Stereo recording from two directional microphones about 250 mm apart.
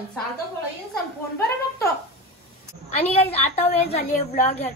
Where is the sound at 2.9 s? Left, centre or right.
Left.